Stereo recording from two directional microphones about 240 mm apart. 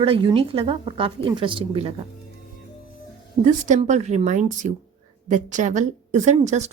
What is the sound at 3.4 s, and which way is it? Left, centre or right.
Speech, right.